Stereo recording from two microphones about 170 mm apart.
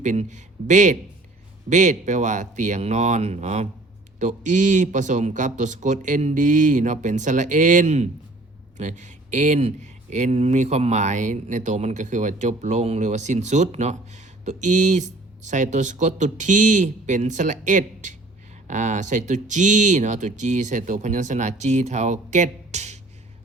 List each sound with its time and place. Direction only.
0.0 s speech: 45° right (ahead or behind)